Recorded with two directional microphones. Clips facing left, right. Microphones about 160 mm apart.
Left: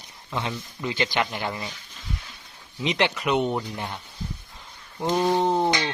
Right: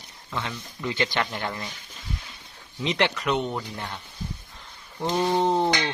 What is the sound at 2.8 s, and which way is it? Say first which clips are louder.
Speech: left 1 dB; 15° left (ahead or behind).